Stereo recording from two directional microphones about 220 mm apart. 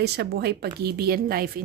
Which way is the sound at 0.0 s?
45° right (ahead or behind).